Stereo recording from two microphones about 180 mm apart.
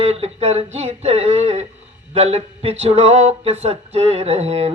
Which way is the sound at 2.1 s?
35° right (ahead or behind).